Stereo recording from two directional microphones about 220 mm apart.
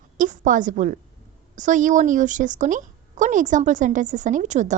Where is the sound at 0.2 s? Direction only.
35° right (ahead or behind).